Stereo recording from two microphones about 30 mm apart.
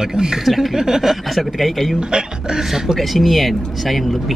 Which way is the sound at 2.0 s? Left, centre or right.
Right.